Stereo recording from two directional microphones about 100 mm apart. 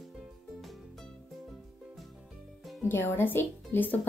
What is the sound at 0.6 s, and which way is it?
Music, centre (ahead or behind).